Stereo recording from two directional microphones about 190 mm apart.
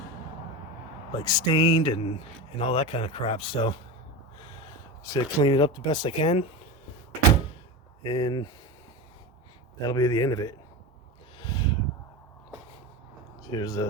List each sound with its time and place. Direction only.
1.2 s speech: 20° left (ahead or behind)
5.0 s speech: 20° left (ahead or behind)
8.0 s speech: 25° left (ahead or behind)
9.8 s speech: 20° left (ahead or behind)
11.3 s a sound: 25° left (ahead or behind)
13.5 s speech: 20° left (ahead or behind)